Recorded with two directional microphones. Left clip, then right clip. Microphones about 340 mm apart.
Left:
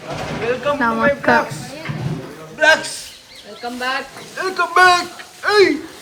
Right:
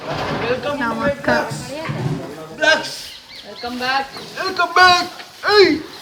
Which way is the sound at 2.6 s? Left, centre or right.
Centre.